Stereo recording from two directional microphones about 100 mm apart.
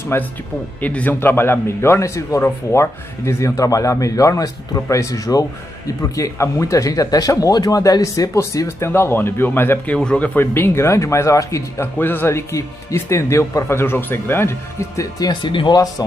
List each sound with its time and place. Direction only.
0.1 s a man's voice: 25° left (ahead or behind)
12.0 s speech: 20° left (ahead or behind)
15.1 s speech: 45° left (ahead or behind)